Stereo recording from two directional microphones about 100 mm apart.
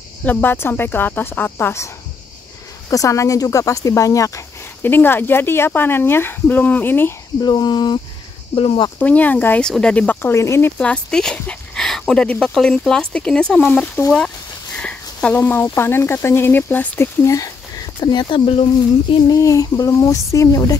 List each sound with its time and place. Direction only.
0.2 s speech: 15° left (ahead or behind)
2.9 s speech: 35° left (ahead or behind)
4.8 s speech: 20° left (ahead or behind)
7.4 s speech: 45° left (ahead or behind)
8.5 s speech: 70° left (ahead or behind)
9.0 s speech: 15° left (ahead or behind)
10.3 s speech: 30° left (ahead or behind)
10.8 s speech: 10° left (ahead or behind); by 18.4 s 50° left (ahead or behind)
18.4 s speech: 70° left (ahead or behind)
19.2 s speech: 35° left (ahead or behind)